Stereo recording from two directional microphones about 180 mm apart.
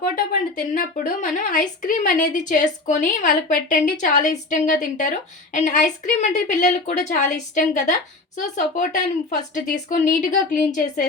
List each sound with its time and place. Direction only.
0.5 s a woman's voice: 50° left (ahead or behind)